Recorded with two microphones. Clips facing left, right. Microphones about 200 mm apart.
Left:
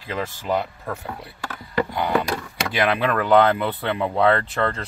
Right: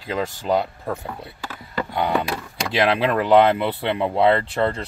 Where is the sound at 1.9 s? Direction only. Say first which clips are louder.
Right 4 dB; 25° right (ahead or behind).